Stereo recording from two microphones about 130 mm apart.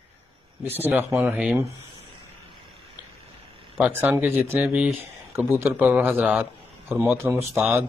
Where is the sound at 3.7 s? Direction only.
5° right (ahead or behind).